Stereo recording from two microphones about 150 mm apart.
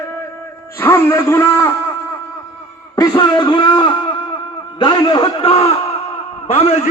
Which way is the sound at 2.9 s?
25° left (ahead or behind).